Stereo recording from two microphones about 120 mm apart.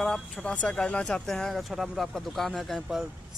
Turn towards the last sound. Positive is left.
turn(degrees=0)  # may be behind; listen again after turning